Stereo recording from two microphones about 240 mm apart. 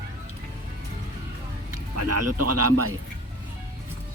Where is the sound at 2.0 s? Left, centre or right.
Right.